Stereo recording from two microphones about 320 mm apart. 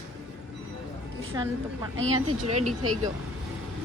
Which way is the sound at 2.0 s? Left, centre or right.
Right.